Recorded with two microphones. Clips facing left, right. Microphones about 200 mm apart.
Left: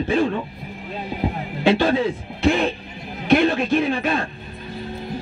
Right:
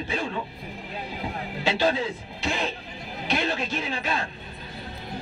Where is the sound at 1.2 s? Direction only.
60° left (ahead or behind).